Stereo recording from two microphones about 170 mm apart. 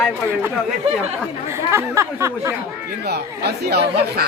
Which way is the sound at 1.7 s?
15° right (ahead or behind).